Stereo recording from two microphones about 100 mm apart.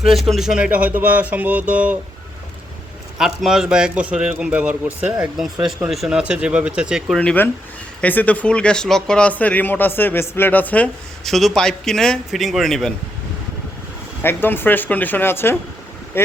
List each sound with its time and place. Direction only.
0.0 s speech: centre (ahead or behind)
3.2 s speech: 5° right (ahead or behind)
7.2 s a man's voice: 15° left (ahead or behind)
11.3 s a man's voice: centre (ahead or behind)
14.2 s speech: 20° left (ahead or behind)